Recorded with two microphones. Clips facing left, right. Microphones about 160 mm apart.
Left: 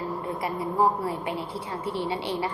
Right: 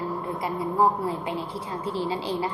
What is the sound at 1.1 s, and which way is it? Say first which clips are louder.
Speech: right 1 dB; 25° right (ahead or behind).